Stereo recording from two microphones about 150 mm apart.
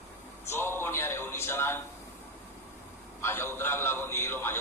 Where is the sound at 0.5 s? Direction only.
15° left (ahead or behind).